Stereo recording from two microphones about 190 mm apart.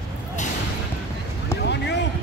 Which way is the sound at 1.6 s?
65° left (ahead or behind).